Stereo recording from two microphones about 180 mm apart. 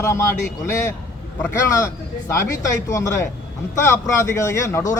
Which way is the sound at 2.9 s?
15° left (ahead or behind).